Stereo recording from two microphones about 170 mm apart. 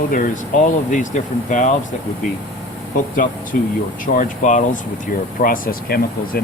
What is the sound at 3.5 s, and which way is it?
Speech, 55° left (ahead or behind).